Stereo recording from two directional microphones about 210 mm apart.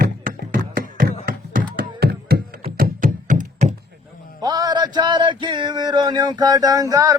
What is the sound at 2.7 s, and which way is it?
Knock, 40° right (ahead or behind).